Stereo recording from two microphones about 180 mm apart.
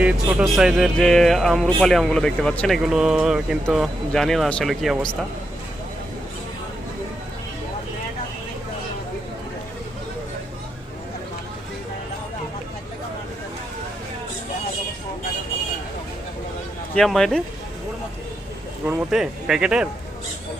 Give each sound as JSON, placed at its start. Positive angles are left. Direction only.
{"t": 0.0, "sound": "speech", "side_deg": -5}
{"t": 16.9, "sound": "speech", "side_deg": 5}
{"t": 18.9, "sound": "speech", "side_deg": -5}